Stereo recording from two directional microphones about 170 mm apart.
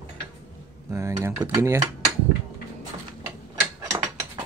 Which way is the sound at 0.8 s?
15° right (ahead or behind).